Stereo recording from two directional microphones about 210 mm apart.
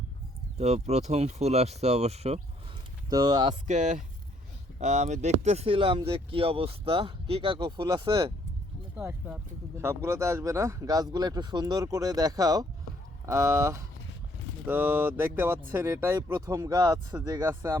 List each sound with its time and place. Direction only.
0.6 s speech: 30° right (ahead or behind)
3.1 s speech: 20° right (ahead or behind)
3.7 s speech: 35° right (ahead or behind)
9.0 s speech: 5° right (ahead or behind)